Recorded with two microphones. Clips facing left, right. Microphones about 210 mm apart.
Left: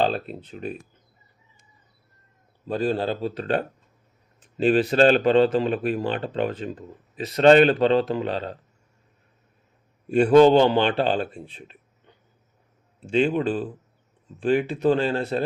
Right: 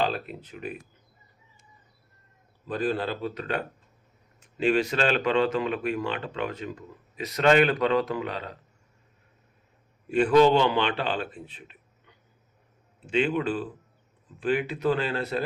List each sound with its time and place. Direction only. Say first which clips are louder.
0.0 s speech: left 4 dB; 30° left (ahead or behind)
2.6 s speech: left 4 dB; 30° left (ahead or behind)
10.2 s speech: left 5 dB; 40° left (ahead or behind)